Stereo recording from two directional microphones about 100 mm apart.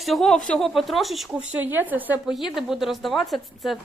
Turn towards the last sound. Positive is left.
turn(degrees=0)  # may be behind; listen again after turning